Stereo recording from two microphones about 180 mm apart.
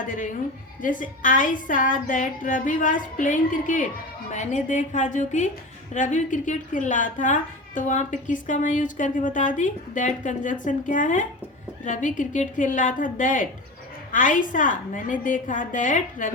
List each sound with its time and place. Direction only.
0.0 s a woman's voice: 45° left (ahead or behind)